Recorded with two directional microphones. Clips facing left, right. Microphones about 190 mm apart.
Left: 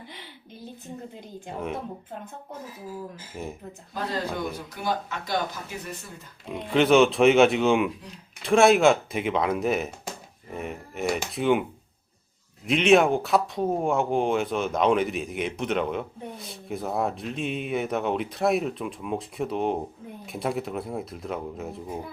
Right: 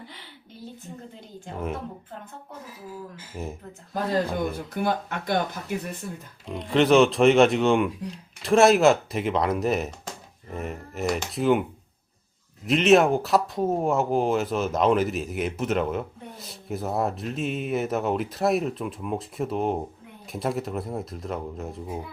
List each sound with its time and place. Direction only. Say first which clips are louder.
1.5 s speech: even; centre (ahead or behind)
3.3 s speech: right 1 dB; centre (ahead or behind)
4.5 s speech: right 3 dB; 55° right (ahead or behind)
6.5 s speech: right 1 dB; centre (ahead or behind)
12.6 s speech: right 1 dB; centre (ahead or behind)